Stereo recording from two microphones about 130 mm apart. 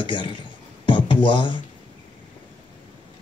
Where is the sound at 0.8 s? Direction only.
40° left (ahead or behind).